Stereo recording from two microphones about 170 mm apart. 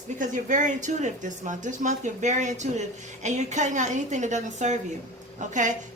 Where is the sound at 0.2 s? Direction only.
50° right (ahead or behind).